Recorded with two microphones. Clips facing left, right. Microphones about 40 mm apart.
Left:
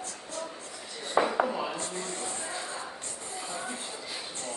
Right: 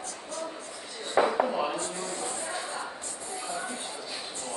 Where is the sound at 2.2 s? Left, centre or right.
Right.